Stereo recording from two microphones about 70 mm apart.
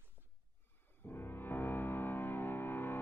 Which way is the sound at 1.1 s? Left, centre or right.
Left.